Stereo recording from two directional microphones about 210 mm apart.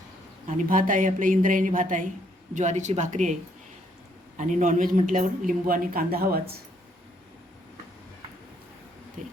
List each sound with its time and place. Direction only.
0.4 s speech: 40° right (ahead or behind)
4.4 s speech: 35° right (ahead or behind)
9.2 s speech: 35° right (ahead or behind)